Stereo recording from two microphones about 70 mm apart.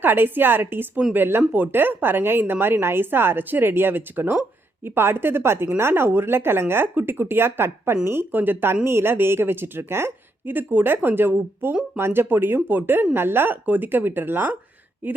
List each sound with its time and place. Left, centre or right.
0.0 s a woman's voice: right